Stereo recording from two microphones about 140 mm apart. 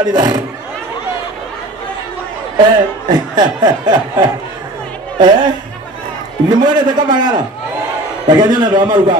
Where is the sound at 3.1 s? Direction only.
30° right (ahead or behind).